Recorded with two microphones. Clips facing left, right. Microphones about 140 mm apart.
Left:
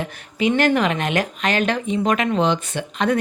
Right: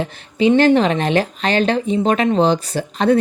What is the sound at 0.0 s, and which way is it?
A woman's voice, 30° right (ahead or behind).